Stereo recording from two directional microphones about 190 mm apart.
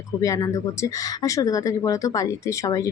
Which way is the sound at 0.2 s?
15° left (ahead or behind).